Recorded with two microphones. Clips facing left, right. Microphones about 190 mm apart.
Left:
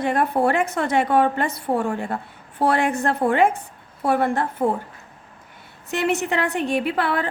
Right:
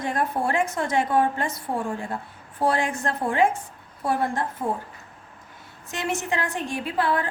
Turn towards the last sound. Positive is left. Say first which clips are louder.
# left 3 dB
turn(degrees=70)  # may be behind; listen again after turning